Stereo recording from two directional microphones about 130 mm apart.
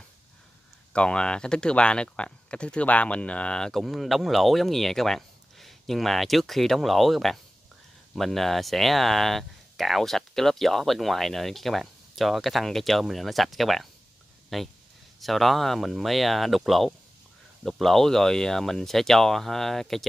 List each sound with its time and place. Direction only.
0.9 s speech: 10° left (ahead or behind)